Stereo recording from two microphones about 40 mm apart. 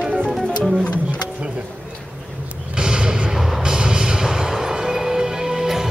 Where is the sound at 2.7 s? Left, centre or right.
Right.